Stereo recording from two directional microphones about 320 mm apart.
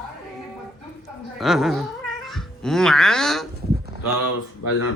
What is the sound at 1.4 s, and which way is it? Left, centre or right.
Speech, centre.